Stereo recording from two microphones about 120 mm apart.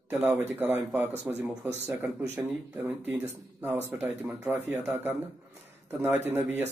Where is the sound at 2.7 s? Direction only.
15° right (ahead or behind).